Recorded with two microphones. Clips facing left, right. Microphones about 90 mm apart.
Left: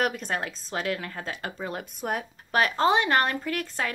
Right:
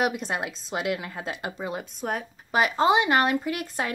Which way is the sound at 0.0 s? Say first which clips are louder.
Right 1 dB; 10° right (ahead or behind).